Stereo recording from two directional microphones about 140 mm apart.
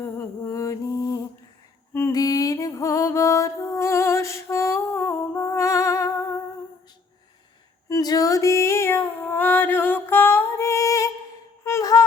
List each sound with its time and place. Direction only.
0.0 s mantra: 20° left (ahead or behind)
2.1 s music: 25° left (ahead or behind)
7.9 s music: 25° left (ahead or behind)
11.6 s a sound: 20° left (ahead or behind)